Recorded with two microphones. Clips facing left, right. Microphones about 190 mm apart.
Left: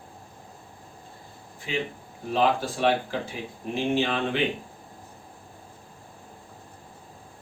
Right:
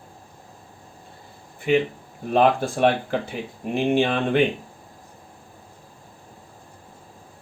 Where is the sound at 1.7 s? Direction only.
60° right (ahead or behind).